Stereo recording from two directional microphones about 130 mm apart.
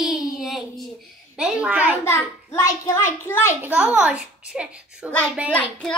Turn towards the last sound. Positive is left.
turn(degrees=10)  # may be behind; listen again after turning